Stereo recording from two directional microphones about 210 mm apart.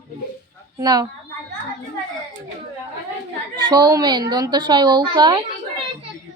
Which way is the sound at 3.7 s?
20° right (ahead or behind).